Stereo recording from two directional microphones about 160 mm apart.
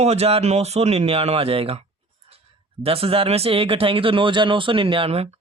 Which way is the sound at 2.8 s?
35° right (ahead or behind).